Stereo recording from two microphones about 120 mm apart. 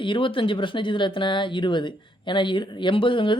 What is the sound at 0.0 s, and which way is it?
Speech, 45° left (ahead or behind).